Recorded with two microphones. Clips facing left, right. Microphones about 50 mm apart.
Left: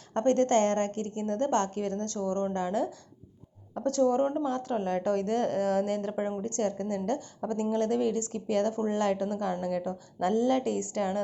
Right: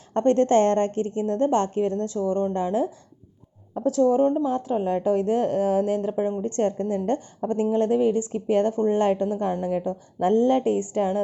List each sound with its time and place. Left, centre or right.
0.1 s a woman's voice: right
3.8 s a woman's voice: centre
6.1 s speech: centre
6.4 s a woman's voice: right